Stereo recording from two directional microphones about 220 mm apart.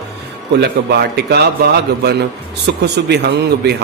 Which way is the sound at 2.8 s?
50° right (ahead or behind).